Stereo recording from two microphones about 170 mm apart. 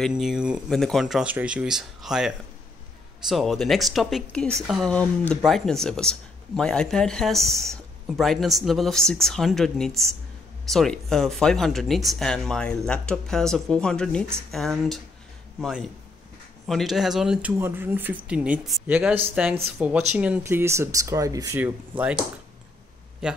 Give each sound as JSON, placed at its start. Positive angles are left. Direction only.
{"t": 0.0, "sound": "speech", "side_deg": -5}
{"t": 23.2, "sound": "speech", "side_deg": -5}